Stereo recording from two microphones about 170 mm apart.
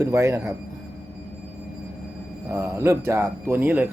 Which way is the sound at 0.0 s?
15° right (ahead or behind).